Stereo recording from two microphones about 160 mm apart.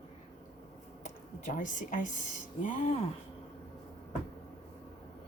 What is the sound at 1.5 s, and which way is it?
Speech, 55° left (ahead or behind).